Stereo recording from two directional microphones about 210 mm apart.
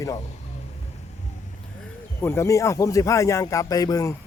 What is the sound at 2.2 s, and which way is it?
A man's voice, 10° left (ahead or behind).